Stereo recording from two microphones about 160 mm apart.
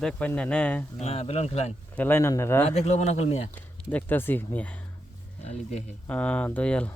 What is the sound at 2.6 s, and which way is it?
Speech, 40° left (ahead or behind).